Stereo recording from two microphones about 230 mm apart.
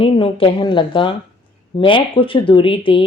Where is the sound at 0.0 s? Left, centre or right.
Left.